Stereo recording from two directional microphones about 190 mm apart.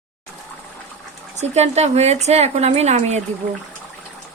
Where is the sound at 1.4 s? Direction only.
35° right (ahead or behind).